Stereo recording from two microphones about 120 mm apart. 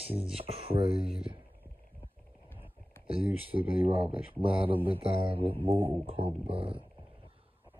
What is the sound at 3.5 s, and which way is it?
Speech, 50° right (ahead or behind).